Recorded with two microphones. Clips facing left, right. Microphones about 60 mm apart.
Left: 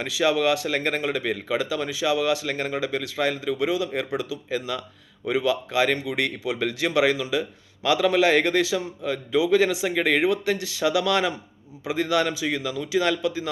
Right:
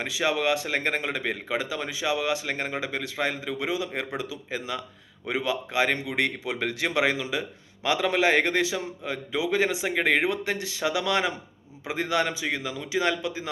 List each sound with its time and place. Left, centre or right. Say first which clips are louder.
0.0 s a man's voice: left 4 dB; right